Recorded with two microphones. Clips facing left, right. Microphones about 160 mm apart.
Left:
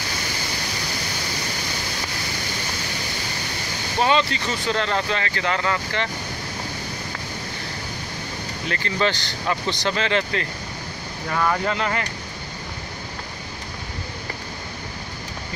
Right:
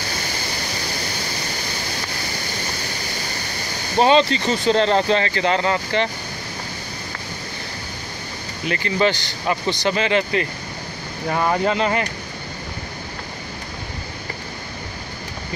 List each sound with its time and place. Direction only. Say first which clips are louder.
4.0 s speech: right 5 dB; 25° right (ahead or behind)
8.6 s speech: right 4 dB; 15° right (ahead or behind)
11.3 s speech: right 3 dB; 25° right (ahead or behind)